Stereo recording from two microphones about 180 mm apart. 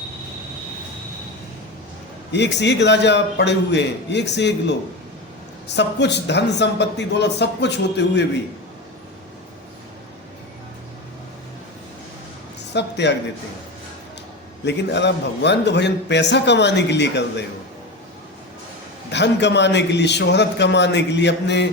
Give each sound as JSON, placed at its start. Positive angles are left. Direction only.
{"t": 2.3, "sound": "a man's voice", "side_deg": 75}
{"t": 12.7, "sound": "a sound", "side_deg": 70}
{"t": 14.6, "sound": "a man's voice", "side_deg": 75}
{"t": 19.1, "sound": "a man's voice", "side_deg": 75}